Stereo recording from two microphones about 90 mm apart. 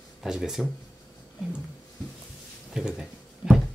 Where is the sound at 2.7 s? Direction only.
5° right (ahead or behind).